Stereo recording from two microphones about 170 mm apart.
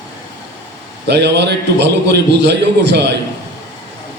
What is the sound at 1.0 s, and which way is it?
A man's voice, 80° right.